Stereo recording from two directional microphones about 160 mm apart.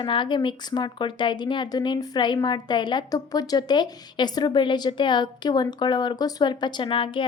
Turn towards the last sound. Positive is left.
turn(degrees=30)  # may be behind; listen again after turning